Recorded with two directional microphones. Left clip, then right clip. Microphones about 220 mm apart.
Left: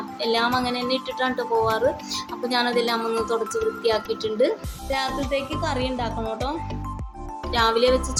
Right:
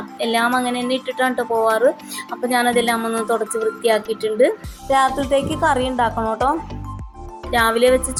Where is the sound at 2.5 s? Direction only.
15° right (ahead or behind).